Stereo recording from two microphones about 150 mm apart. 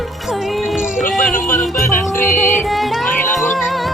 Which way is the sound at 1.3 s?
65° left (ahead or behind).